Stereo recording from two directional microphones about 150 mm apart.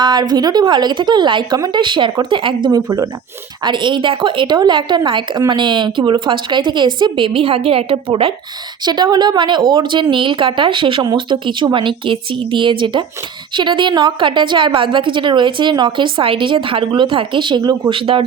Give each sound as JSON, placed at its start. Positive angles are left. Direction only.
{"t": 0.0, "sound": "a woman's voice", "side_deg": -30}